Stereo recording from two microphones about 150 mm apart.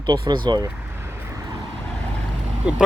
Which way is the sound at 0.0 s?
30° right (ahead or behind).